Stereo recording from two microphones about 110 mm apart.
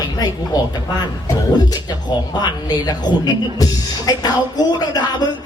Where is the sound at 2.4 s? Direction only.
40° left (ahead or behind).